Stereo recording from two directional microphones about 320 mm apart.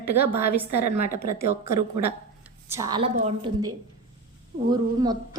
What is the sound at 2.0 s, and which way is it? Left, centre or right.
Speech, right.